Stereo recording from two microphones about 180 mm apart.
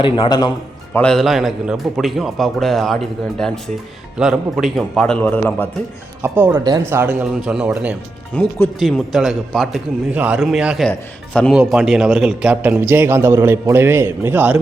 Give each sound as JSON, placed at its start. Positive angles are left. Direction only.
{"t": 0.0, "sound": "a man's voice", "side_deg": 25}
{"t": 0.9, "sound": "a man's voice", "side_deg": 5}
{"t": 6.2, "sound": "a man's voice", "side_deg": -10}
{"t": 6.7, "sound": "speech", "side_deg": -20}
{"t": 7.0, "sound": "a man's voice", "side_deg": -10}
{"t": 8.4, "sound": "speech", "side_deg": 15}
{"t": 8.8, "sound": "a man's voice", "side_deg": 0}